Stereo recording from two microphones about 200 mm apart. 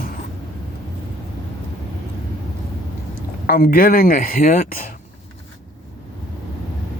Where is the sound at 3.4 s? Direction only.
45° left (ahead or behind).